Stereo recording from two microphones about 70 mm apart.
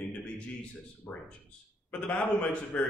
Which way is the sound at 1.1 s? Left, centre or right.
Left.